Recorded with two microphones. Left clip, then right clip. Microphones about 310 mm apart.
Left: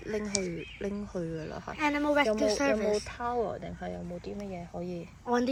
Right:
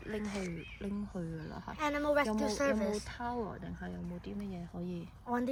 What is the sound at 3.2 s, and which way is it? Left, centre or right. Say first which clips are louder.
Speech: left 6 dB; left.